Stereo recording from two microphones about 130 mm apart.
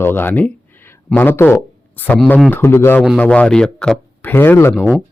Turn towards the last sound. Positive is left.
turn(degrees=15)  # may be behind; listen again after turning